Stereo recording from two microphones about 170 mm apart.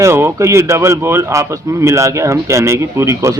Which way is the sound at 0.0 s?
15° right (ahead or behind).